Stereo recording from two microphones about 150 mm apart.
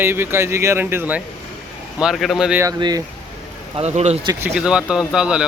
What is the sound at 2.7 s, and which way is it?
Speech, 30° right (ahead or behind).